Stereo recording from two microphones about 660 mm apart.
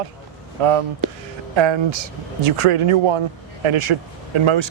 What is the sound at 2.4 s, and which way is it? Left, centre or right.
Speech, right.